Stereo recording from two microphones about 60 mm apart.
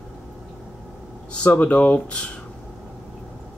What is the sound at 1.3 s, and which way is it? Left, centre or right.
Speech, left.